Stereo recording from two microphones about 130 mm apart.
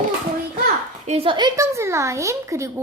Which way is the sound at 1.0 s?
50° right (ahead or behind).